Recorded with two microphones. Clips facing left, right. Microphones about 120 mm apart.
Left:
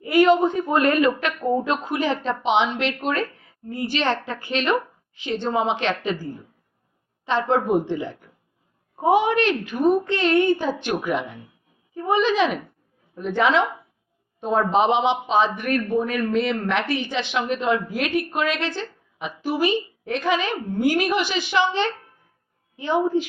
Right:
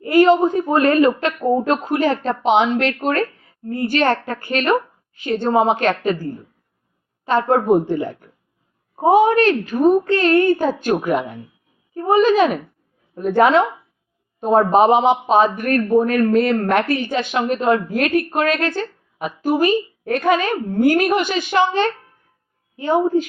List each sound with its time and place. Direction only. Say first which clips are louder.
0.0 s a woman's voice: right 3 dB; 40° right (ahead or behind)
7.3 s speech: right 5 dB; 45° right (ahead or behind)